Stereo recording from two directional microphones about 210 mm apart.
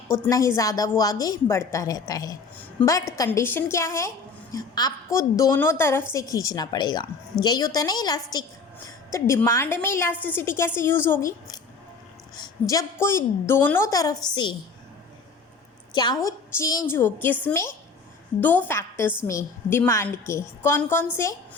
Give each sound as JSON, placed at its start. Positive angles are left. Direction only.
{"t": 0.1, "sound": "a woman's voice", "side_deg": 15}
{"t": 15.9, "sound": "a woman's voice", "side_deg": 20}
{"t": 18.3, "sound": "a woman's voice", "side_deg": 10}